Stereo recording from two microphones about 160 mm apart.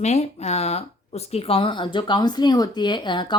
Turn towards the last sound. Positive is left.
turn(degrees=30)  # may be behind; listen again after turning